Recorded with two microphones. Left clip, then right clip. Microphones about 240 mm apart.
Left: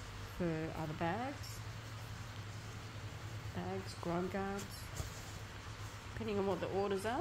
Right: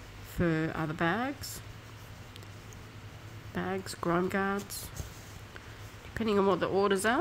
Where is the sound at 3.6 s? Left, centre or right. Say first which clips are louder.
Right 9 dB; right.